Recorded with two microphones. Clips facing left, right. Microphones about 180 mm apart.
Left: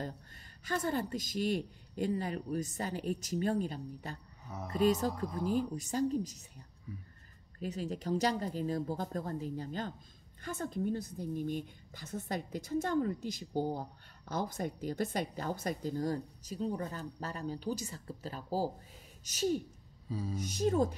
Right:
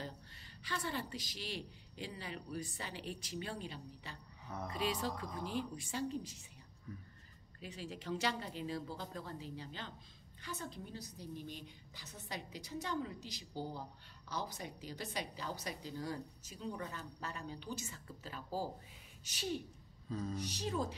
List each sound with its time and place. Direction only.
0.7 s a woman's voice: 45° left (ahead or behind)
7.6 s a woman's voice: 45° left (ahead or behind)
20.1 s a sound: 10° left (ahead or behind)
20.3 s a woman's voice: 50° left (ahead or behind)